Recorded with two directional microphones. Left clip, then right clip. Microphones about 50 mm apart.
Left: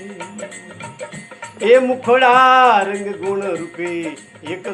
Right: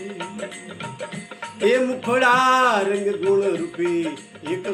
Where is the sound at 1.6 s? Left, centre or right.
Right.